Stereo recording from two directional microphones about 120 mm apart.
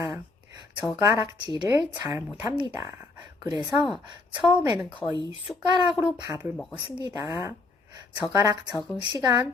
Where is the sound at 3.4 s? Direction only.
30° right (ahead or behind).